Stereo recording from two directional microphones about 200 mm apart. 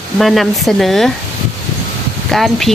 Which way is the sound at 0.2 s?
Centre (ahead or behind).